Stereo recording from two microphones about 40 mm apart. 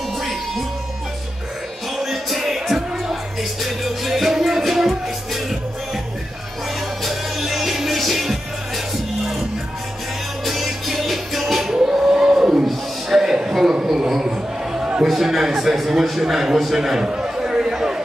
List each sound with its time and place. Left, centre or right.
0.2 s music: centre
2.0 s music: centre
7.1 s music: centre
10.4 s music: centre; by 12.6 s right
13.2 s a sound: centre
15.9 s a man's voice: centre
17.0 s a sound: centre